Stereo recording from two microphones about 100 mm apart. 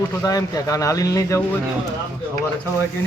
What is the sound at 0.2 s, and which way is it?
Speech, 35° left (ahead or behind).